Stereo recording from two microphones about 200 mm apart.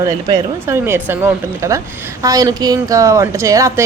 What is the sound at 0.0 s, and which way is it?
Speech, 15° right (ahead or behind).